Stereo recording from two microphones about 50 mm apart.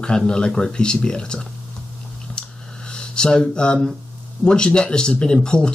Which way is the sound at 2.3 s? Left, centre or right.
Centre.